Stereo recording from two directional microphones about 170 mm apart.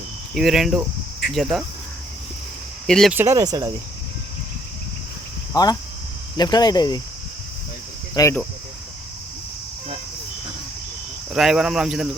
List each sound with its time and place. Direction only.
0.3 s speech: centre (ahead or behind)
2.8 s speech: 5° left (ahead or behind)
3.1 s speech: 15° right (ahead or behind)
5.5 s speech: 25° left (ahead or behind)
8.1 s speech: 20° left (ahead or behind)
11.3 s speech: 5° right (ahead or behind)